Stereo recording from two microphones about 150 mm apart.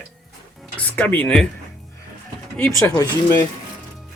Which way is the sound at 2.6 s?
20° left (ahead or behind).